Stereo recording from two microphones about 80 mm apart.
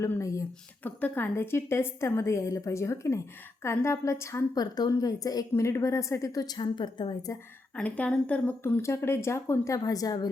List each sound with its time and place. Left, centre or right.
0.2 s a woman's voice: left
0.9 s a woman's voice: left
4.5 s a woman's voice: left
5.6 s a woman's voice: left
6.6 s a woman's voice: left
7.8 s speech: centre
8.8 s a woman's voice: left